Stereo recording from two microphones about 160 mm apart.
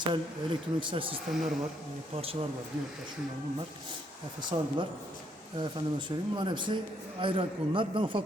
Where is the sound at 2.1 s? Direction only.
35° right (ahead or behind).